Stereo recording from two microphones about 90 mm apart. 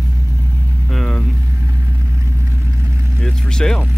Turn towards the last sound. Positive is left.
turn(degrees=10)  # may be behind; listen again after turning